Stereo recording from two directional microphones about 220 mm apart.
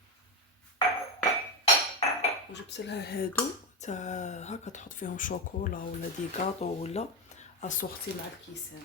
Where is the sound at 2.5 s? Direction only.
50° left (ahead or behind).